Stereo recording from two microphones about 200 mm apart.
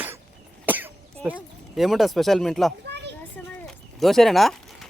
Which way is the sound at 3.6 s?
Centre (ahead or behind).